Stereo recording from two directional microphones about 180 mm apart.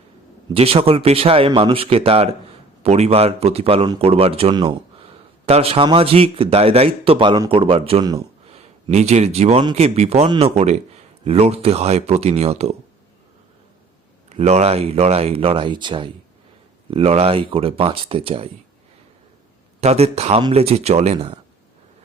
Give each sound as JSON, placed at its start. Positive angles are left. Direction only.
{"t": 0.5, "sound": "a man's voice", "side_deg": -35}
{"t": 14.3, "sound": "a man's voice", "side_deg": -35}
{"t": 19.8, "sound": "a man's voice", "side_deg": -35}